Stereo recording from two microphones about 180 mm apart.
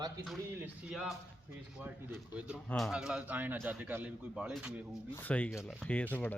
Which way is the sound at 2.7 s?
Centre (ahead or behind).